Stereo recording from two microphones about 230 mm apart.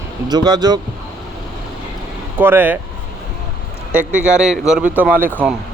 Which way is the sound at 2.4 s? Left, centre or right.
Centre.